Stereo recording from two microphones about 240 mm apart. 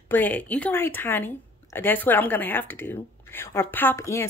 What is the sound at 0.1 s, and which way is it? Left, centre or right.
A woman's voice, centre.